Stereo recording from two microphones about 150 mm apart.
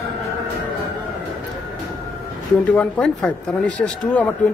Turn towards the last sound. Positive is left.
turn(degrees=10)  # may be behind; listen again after turning